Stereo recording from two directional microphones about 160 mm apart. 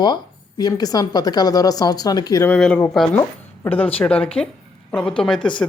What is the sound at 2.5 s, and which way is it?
A woman's voice, 5° left (ahead or behind).